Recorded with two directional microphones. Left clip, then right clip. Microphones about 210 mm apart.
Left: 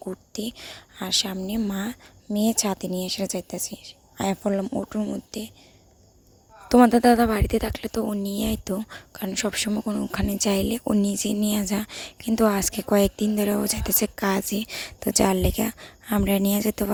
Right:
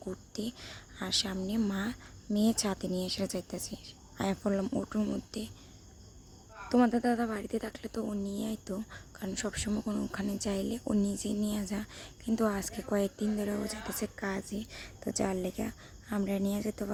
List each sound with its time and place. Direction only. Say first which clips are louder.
0.0 s a woman's voice: left 7 dB; 35° left (ahead or behind)
6.7 s a woman's voice: left 12 dB; 45° left (ahead or behind)